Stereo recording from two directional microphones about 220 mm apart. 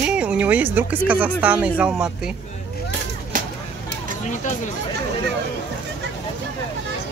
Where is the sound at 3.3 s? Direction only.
35° right (ahead or behind).